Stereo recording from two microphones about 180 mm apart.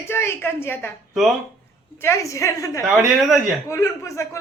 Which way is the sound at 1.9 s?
15° left (ahead or behind).